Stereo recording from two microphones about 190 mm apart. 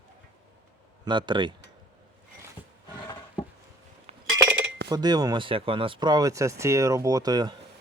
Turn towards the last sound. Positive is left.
turn(degrees=-20)  # may be behind; listen again after turning